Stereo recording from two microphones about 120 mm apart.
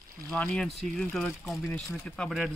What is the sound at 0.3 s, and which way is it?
Speech, 5° left (ahead or behind).